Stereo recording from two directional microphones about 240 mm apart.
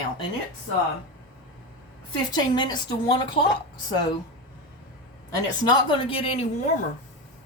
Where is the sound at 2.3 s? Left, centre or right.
Centre.